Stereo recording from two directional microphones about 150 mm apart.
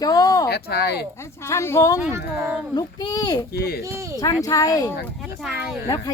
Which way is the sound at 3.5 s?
90° left.